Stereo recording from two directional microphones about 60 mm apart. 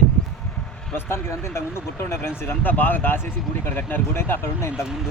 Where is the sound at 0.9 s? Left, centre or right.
Left.